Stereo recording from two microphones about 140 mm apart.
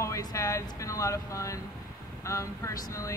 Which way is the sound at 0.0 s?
25° left (ahead or behind).